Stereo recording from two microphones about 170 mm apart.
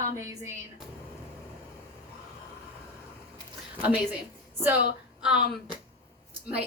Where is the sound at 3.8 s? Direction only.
10° right (ahead or behind).